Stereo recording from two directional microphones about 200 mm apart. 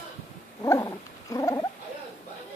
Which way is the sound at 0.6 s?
15° left (ahead or behind).